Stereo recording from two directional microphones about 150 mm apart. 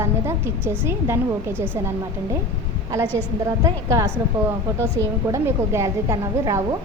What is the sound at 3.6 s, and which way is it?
Speech, 20° right (ahead or behind).